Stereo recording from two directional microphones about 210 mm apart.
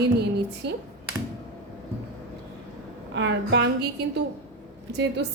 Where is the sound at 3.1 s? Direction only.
55° right (ahead or behind).